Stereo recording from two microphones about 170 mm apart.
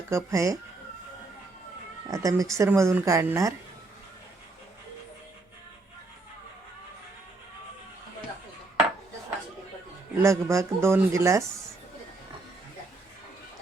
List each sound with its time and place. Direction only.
0.1 s speech: 20° right (ahead or behind)
2.0 s speech: 20° right (ahead or behind)
10.2 s speech: 15° right (ahead or behind)